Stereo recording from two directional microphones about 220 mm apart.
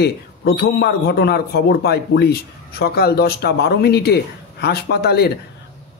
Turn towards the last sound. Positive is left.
turn(degrees=45)  # may be behind; listen again after turning